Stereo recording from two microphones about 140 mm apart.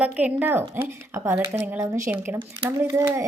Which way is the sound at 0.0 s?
10° right (ahead or behind).